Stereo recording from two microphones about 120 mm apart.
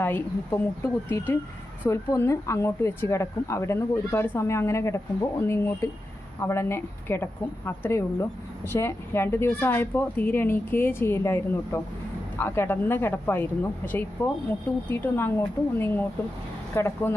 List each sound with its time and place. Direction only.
0.0 s speech: 20° left (ahead or behind)